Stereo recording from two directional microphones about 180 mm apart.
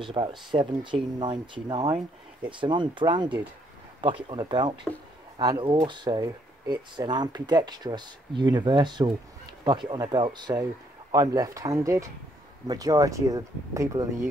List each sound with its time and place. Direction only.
0.0 s speech: 25° right (ahead or behind)